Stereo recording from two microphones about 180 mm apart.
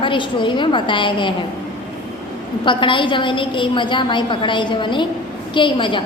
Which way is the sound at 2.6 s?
25° left (ahead or behind).